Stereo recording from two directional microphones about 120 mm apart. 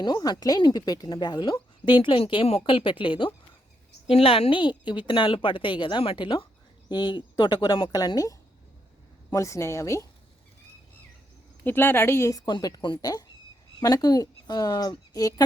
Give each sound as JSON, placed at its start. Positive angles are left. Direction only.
{"t": 0.0, "sound": "speech", "side_deg": 35}
{"t": 4.1, "sound": "a woman's voice", "side_deg": 55}
{"t": 11.6, "sound": "a woman's voice", "side_deg": 15}
{"t": 12.5, "sound": "speech", "side_deg": 35}